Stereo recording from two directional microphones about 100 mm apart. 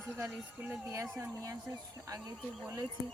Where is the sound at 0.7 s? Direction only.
30° right (ahead or behind).